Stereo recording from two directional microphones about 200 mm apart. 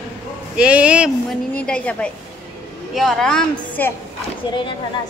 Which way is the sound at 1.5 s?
5° left (ahead or behind).